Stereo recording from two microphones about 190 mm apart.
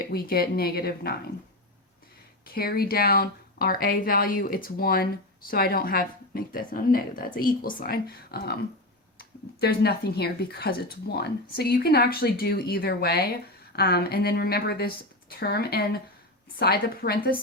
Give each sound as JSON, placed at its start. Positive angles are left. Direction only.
{"t": 0.0, "sound": "a woman's voice", "side_deg": 55}
{"t": 2.5, "sound": "a woman's voice", "side_deg": 55}